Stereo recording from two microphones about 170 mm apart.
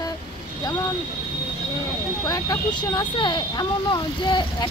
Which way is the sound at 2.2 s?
20° left (ahead or behind).